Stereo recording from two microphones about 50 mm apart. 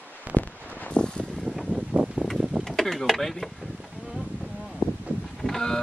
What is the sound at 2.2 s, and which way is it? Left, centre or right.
Vehicle, right.